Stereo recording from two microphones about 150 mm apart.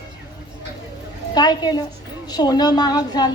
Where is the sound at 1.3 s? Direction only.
30° left (ahead or behind).